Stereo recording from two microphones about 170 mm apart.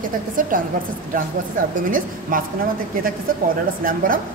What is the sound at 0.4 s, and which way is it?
Speech, 55° right (ahead or behind).